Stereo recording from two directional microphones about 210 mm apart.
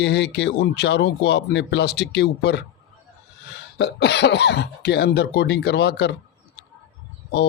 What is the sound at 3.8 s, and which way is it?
Speech, 55° left (ahead or behind).